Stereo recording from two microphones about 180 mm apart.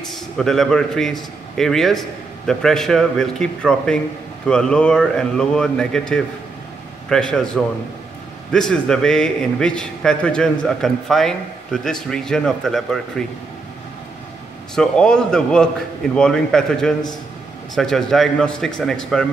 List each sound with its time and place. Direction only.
0.1 s a man's voice: centre (ahead or behind)
14.8 s a man's voice: 5° left (ahead or behind)